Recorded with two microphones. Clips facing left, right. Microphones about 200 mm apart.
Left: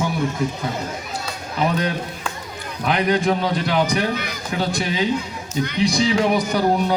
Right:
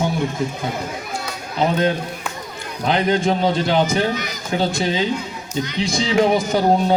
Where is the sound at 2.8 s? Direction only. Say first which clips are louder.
Right 1 dB; 25° right (ahead or behind).